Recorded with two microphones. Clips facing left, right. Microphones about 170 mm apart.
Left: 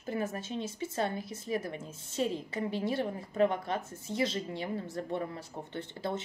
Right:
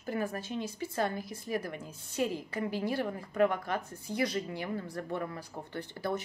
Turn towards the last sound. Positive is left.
turn(degrees=25)  # may be behind; listen again after turning